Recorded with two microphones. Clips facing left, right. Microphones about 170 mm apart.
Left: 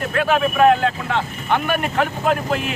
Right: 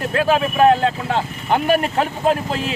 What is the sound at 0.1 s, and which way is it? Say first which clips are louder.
Speech: right 1 dB; 30° right (ahead or behind).